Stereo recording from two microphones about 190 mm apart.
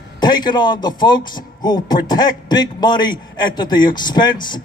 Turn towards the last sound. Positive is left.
turn(degrees=25)  # may be behind; listen again after turning